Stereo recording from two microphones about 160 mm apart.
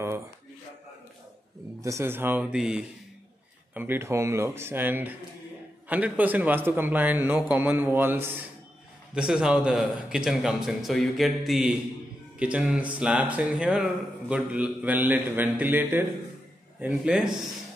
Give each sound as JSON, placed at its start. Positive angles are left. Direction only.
{"t": 1.8, "sound": "a man's voice", "side_deg": -20}